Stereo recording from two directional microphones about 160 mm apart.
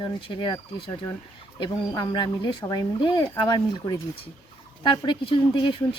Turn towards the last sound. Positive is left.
turn(degrees=30)  # may be behind; listen again after turning